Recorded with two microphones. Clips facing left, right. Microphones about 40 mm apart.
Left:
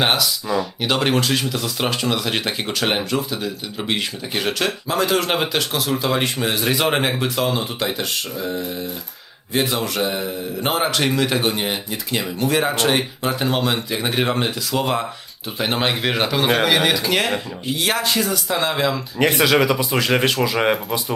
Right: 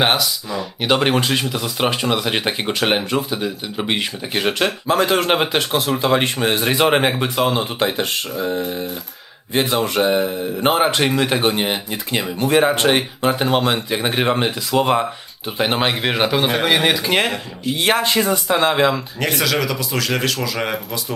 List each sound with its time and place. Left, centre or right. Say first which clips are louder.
0.0 s speech: right 1 dB; centre
17.7 s speech: right 3 dB; right
19.4 s speech: left 4 dB; centre